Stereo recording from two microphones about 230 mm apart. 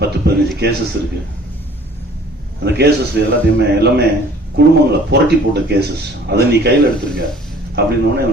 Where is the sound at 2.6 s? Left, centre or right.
Right.